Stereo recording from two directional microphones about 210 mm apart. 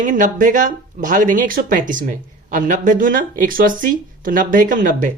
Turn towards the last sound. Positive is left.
turn(degrees=-40)  # may be behind; listen again after turning